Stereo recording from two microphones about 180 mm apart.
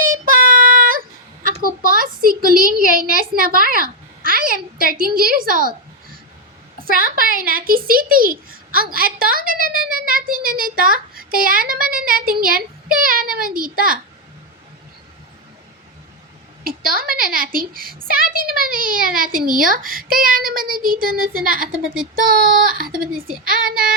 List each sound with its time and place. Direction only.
0.0 s child singing: 50° right (ahead or behind)
1.6 s a sound: 50° right (ahead or behind)
5.5 s a child's voice: 50° right (ahead or behind)
7.0 s a child's voice: 50° right (ahead or behind)
16.6 s a child's voice: 55° right (ahead or behind)